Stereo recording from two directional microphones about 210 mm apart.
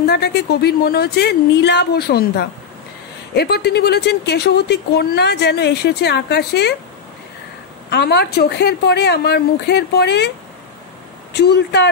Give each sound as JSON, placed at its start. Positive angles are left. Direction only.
{"t": 0.0, "sound": "speech", "side_deg": 50}
{"t": 7.9, "sound": "speech", "side_deg": 50}
{"t": 11.3, "sound": "speech", "side_deg": 50}